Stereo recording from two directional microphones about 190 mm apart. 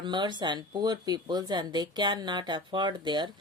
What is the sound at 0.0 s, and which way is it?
A woman's voice, 25° right (ahead or behind).